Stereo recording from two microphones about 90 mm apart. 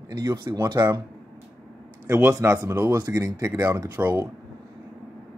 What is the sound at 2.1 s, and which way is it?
Speech, 30° right (ahead or behind).